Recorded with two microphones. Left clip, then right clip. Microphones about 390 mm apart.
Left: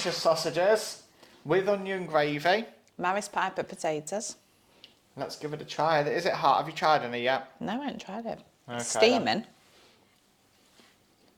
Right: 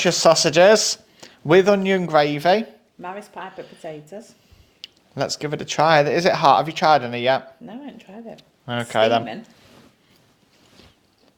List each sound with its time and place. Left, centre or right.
0.0 s speech: right
3.0 s a woman's voice: left
4.8 s speech: right
7.6 s speech: left
8.6 s speech: right